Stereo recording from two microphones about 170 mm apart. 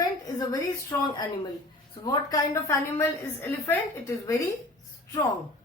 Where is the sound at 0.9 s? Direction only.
25° left (ahead or behind).